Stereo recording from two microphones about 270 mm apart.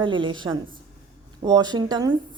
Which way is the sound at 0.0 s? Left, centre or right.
Centre.